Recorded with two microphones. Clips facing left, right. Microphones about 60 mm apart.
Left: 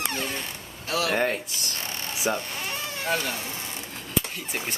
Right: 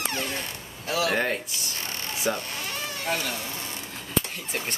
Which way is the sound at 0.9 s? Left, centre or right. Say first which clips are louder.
Even; centre.